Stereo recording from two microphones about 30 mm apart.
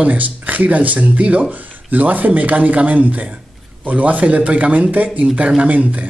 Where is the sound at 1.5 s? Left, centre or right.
Right.